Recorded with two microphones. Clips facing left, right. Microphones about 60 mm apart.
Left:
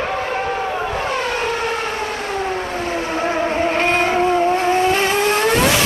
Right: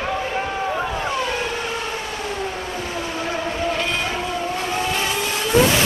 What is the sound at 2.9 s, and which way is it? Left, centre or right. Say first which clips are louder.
Vehicle: left 6 dB; left.